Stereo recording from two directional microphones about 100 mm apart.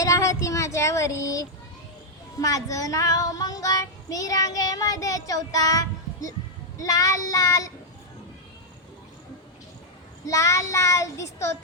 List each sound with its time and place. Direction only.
0.0 s speech: 30° left (ahead or behind)
2.4 s child singing: 35° left (ahead or behind)
10.2 s child singing: 30° left (ahead or behind)